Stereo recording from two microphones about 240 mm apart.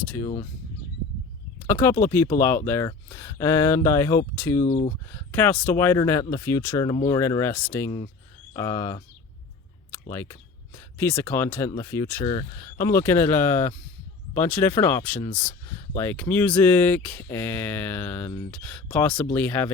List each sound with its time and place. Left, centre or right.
0.2 s speech: centre
1.6 s speech: centre
4.7 s speech: left
5.1 s speech: centre
10.1 s speech: centre